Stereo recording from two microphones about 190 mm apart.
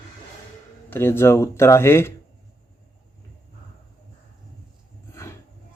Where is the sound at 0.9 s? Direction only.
15° left (ahead or behind).